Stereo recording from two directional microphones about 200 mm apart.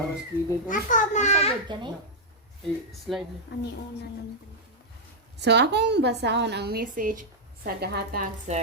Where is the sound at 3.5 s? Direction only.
55° left (ahead or behind).